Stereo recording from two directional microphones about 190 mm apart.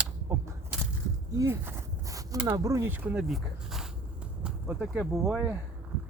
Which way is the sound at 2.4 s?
15° right (ahead or behind).